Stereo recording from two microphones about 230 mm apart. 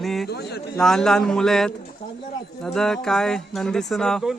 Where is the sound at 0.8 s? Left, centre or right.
Centre.